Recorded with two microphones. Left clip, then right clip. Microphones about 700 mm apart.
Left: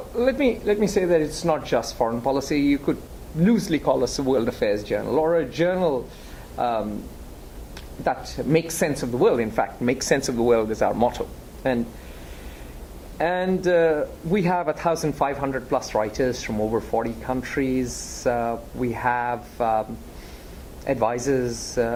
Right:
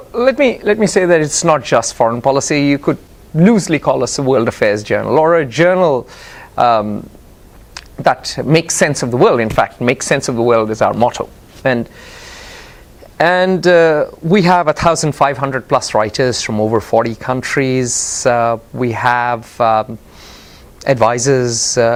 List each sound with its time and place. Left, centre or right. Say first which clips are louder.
0.2 s speech: right 9 dB; right
13.1 s speech: right 11 dB; right